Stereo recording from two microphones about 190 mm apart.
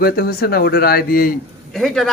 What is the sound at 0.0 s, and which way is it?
Speech, 50° left (ahead or behind).